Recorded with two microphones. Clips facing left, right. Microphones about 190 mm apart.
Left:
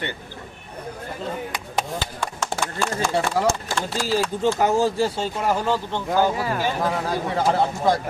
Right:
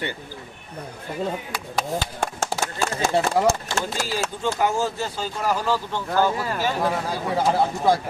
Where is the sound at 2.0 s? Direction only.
45° right (ahead or behind).